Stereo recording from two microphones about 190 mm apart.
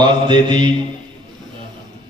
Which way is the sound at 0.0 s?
25° right (ahead or behind).